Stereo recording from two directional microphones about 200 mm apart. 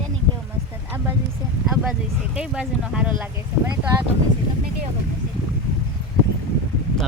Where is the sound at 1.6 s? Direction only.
Centre (ahead or behind).